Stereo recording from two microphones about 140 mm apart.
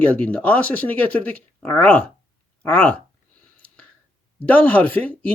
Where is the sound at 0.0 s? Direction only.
10° left (ahead or behind).